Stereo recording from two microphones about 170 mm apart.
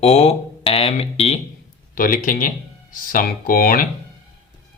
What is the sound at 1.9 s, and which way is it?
Speech, 55° left (ahead or behind).